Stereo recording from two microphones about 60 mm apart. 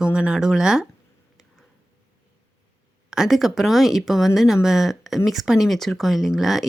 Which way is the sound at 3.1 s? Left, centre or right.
Centre.